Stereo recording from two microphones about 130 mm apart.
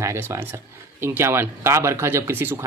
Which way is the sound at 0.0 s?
20° right (ahead or behind).